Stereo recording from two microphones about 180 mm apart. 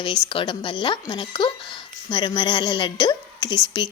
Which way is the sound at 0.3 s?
30° left (ahead or behind).